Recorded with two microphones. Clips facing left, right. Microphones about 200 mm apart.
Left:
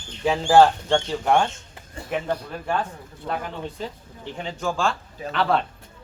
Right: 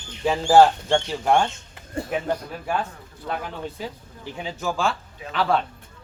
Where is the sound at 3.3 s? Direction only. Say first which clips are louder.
Even; centre (ahead or behind).